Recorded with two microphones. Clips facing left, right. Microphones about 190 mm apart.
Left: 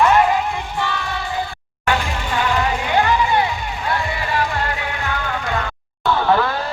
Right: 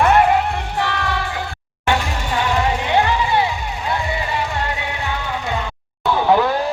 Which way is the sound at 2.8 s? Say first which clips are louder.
Even; 25° right (ahead or behind).